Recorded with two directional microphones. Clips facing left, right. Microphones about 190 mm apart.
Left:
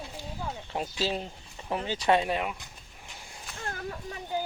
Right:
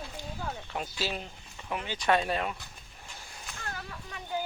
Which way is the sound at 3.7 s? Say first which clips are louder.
Left 7 dB; 40° left (ahead or behind).